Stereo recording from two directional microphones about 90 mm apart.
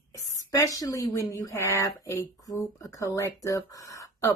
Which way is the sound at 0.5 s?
35° left (ahead or behind).